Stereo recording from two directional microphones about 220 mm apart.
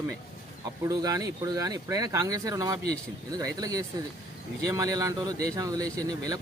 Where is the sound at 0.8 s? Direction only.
15° right (ahead or behind).